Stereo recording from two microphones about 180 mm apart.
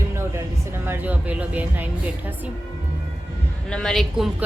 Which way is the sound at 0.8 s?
10° right (ahead or behind).